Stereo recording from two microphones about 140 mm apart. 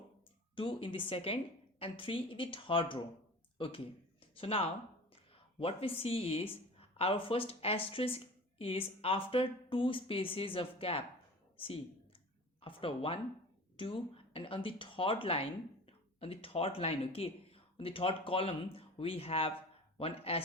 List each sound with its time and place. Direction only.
0.5 s speech: 40° left (ahead or behind)
12.6 s speech: 40° left (ahead or behind)